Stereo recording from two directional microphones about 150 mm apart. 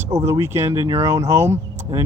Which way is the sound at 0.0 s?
20° right (ahead or behind).